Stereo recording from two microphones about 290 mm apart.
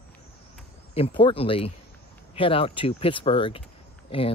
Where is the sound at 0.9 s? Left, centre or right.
Centre.